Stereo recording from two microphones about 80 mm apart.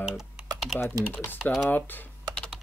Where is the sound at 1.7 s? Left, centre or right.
Left.